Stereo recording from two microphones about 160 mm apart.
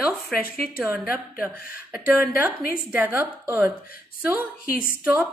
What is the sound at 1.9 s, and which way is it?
A woman's voice, 10° right (ahead or behind).